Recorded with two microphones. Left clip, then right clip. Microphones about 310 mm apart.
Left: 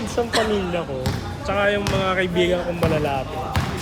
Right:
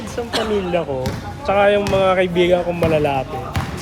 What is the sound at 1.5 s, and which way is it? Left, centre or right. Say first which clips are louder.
Speech: right 6 dB; centre.